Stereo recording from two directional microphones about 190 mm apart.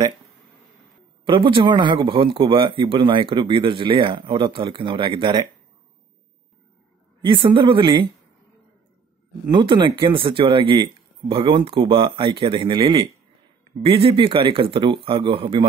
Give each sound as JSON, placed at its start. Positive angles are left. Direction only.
{"t": 1.2, "sound": "speech", "side_deg": -25}
{"t": 7.2, "sound": "speech", "side_deg": -25}
{"t": 9.5, "sound": "speech", "side_deg": -25}